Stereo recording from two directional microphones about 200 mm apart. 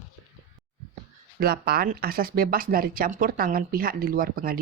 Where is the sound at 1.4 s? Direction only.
50° right (ahead or behind).